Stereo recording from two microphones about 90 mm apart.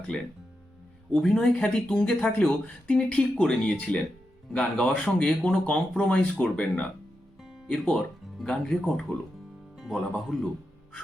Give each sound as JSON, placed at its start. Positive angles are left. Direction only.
{"t": 1.1, "sound": "speech", "side_deg": 5}
{"t": 9.7, "sound": "speech", "side_deg": 0}